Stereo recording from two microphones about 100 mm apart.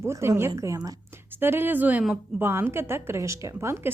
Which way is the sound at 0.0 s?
25° right (ahead or behind).